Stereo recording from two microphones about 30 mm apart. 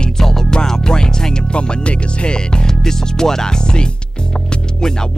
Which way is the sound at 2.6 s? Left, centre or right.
Centre.